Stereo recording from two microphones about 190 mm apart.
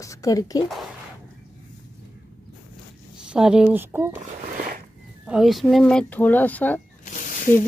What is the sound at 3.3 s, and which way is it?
Speech, 5° right (ahead or behind).